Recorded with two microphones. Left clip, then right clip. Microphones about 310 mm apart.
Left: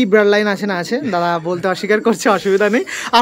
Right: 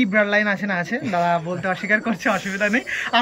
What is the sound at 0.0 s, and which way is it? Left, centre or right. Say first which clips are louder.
Speech: left 6 dB; centre.